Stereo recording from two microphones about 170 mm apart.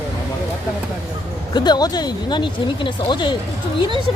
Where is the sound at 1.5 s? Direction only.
25° left (ahead or behind).